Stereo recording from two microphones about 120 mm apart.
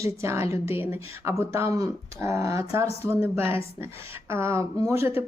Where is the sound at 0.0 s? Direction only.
25° right (ahead or behind).